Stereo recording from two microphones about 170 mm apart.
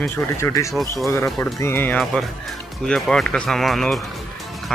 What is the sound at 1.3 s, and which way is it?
Speech, 15° left (ahead or behind).